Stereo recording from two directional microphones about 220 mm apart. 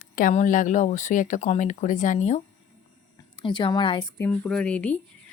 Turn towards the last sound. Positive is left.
turn(degrees=5)  # may be behind; listen again after turning